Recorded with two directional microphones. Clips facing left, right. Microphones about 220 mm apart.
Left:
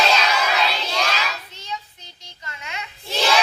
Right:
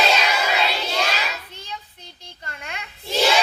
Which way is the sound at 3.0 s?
10° right (ahead or behind).